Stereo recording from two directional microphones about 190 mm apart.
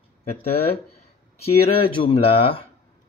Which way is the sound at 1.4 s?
30° left (ahead or behind).